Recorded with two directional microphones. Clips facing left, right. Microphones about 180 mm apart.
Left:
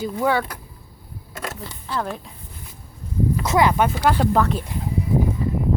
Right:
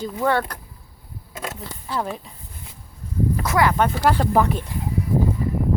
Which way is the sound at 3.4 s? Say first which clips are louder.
Left 2 dB; 20° left (ahead or behind).